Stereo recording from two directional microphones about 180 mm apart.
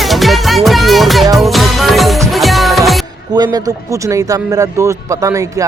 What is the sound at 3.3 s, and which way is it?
A man's voice, 20° right (ahead or behind).